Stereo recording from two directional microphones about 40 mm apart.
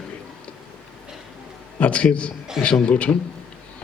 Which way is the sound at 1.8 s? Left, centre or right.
Left.